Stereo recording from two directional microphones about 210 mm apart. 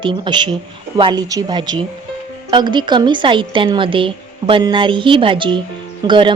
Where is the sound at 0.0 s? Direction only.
20° right (ahead or behind).